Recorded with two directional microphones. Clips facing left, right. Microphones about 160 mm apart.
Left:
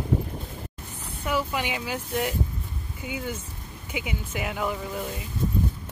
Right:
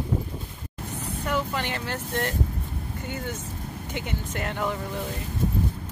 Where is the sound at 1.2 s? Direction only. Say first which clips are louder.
Left 1 dB; 10° left (ahead or behind).